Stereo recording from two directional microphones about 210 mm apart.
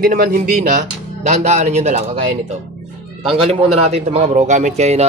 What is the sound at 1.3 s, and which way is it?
Speech, 35° right (ahead or behind).